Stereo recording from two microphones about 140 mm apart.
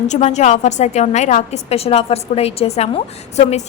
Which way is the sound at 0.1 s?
50° left (ahead or behind).